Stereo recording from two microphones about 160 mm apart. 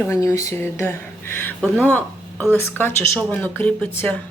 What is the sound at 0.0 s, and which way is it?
Speech, 20° left (ahead or behind).